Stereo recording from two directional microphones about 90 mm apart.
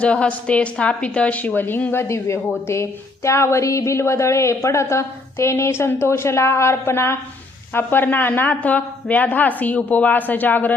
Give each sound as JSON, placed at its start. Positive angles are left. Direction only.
{"t": 0.0, "sound": "a woman's voice", "side_deg": 15}